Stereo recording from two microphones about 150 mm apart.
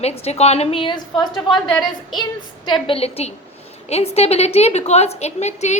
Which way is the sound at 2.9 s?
45° left (ahead or behind).